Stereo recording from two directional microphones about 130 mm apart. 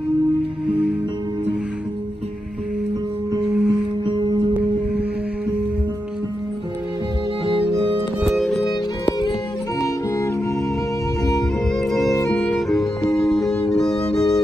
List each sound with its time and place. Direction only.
3.4 s music: 5° right (ahead or behind)
4.0 s music: 40° right (ahead or behind)
8.2 s music: centre (ahead or behind)
9.8 s music: 25° left (ahead or behind)
11.7 s music: centre (ahead or behind)
12.1 s music: 25° left (ahead or behind)
12.4 s music: 5° left (ahead or behind)